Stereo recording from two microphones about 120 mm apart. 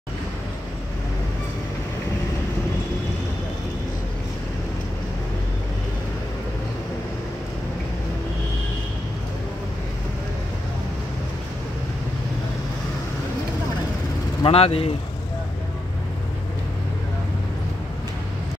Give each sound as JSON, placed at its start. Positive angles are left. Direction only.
{"t": 14.4, "sound": "speech", "side_deg": 55}